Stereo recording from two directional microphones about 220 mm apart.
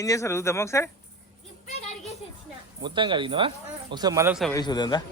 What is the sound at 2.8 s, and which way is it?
Speech, 20° right (ahead or behind).